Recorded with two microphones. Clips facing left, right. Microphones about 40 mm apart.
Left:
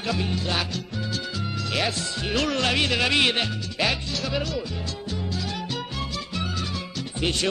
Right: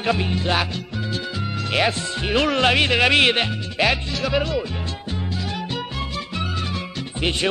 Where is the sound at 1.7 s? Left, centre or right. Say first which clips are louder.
Right 6 dB; right.